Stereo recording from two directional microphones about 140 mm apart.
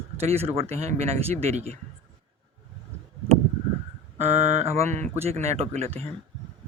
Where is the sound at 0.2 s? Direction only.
50° right (ahead or behind).